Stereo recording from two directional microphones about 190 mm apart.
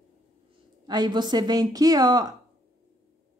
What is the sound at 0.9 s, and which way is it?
A woman's voice, 20° right (ahead or behind).